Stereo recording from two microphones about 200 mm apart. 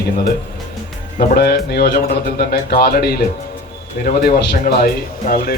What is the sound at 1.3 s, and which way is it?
A man's voice, 50° left (ahead or behind).